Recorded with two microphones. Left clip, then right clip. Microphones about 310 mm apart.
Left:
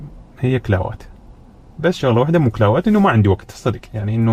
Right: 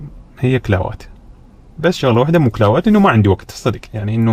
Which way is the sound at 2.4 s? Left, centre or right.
Right.